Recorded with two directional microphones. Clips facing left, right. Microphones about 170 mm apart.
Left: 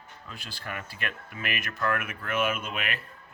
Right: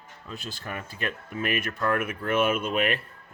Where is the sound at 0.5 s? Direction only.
25° right (ahead or behind).